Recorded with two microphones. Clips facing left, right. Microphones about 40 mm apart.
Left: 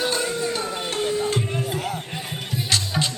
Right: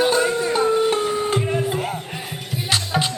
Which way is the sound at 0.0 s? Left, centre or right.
Centre.